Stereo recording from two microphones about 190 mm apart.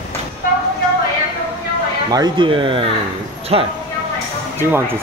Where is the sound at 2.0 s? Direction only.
20° right (ahead or behind).